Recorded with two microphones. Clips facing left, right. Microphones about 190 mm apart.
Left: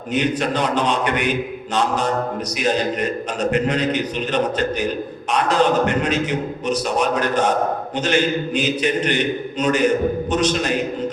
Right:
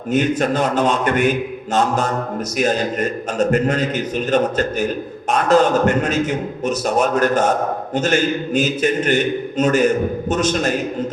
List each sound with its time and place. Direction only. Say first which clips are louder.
0.1 s a man's voice: right 3 dB; 45° right (ahead or behind)